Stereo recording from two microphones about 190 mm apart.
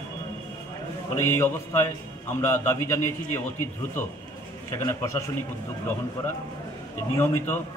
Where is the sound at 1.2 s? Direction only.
15° left (ahead or behind).